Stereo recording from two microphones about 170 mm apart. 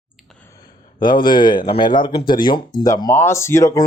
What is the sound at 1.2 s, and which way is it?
Speech, 25° left (ahead or behind).